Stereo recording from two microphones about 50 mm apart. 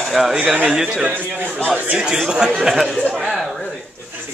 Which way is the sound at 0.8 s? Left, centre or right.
Centre.